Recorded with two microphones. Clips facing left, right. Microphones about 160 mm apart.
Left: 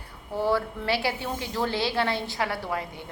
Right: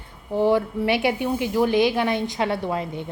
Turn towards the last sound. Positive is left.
turn(degrees=-20)  # may be behind; listen again after turning